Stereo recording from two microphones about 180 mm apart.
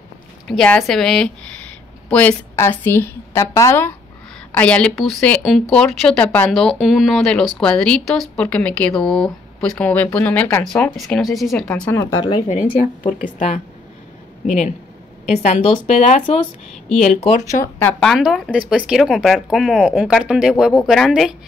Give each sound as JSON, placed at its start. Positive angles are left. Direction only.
{"t": 0.5, "sound": "a woman's voice", "side_deg": 5}
{"t": 14.4, "sound": "speech", "side_deg": 40}
{"t": 17.7, "sound": "a woman's voice", "side_deg": 5}